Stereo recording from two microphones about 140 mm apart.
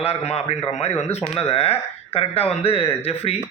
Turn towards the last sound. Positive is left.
turn(degrees=45)  # may be behind; listen again after turning